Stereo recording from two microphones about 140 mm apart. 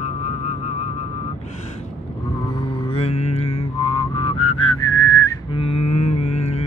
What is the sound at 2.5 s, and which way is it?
Mantra, 40° left (ahead or behind).